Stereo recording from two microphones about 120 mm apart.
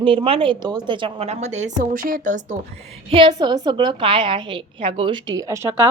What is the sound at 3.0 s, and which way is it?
A woman's voice, 45° right (ahead or behind).